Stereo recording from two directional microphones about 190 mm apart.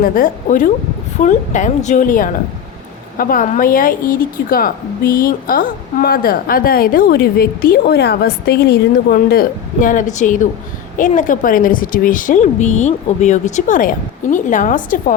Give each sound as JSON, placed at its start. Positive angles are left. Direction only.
{"t": 0.0, "sound": "a woman's voice", "side_deg": 45}